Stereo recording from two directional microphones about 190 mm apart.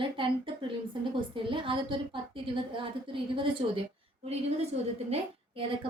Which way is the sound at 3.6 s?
35° right (ahead or behind).